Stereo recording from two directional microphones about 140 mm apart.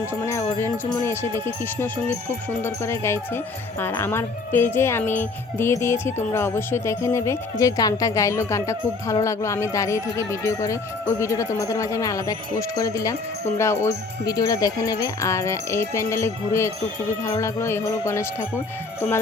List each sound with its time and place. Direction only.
0.1 s speech: 20° left (ahead or behind)
18.9 s music: 15° left (ahead or behind)